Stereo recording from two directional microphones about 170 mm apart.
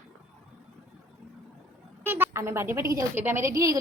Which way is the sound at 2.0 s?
15° right (ahead or behind).